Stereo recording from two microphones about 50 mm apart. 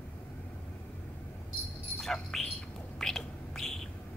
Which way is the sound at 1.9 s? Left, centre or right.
Centre.